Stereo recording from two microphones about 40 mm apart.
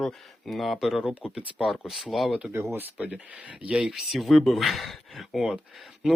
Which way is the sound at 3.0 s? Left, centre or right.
Right.